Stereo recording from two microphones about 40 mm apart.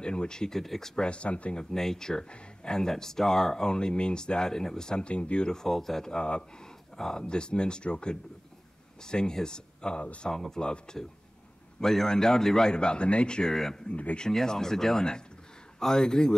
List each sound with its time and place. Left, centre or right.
0.0 s speech: left
1.0 s speech: left
1.6 s speech: centre; by 5.5 s left
5.5 s speech: centre
6.1 s speech: left
10.3 s speech: centre
13.8 s speech: left
14.3 s speech: centre